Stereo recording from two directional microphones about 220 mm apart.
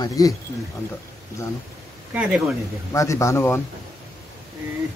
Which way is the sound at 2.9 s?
15° left (ahead or behind).